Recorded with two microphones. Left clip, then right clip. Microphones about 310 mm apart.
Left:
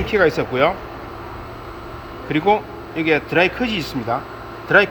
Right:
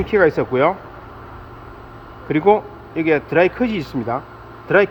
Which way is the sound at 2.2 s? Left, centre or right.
Centre.